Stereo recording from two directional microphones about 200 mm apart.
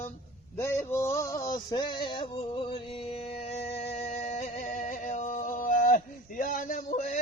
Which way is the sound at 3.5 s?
30° left (ahead or behind).